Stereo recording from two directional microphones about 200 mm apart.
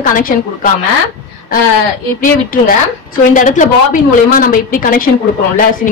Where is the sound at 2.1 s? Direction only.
45° left (ahead or behind).